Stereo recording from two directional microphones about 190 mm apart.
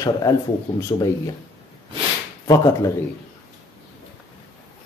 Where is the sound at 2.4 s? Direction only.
20° left (ahead or behind).